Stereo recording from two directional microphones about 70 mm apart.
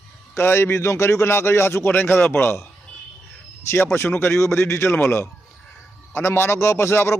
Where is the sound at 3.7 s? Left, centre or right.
Left.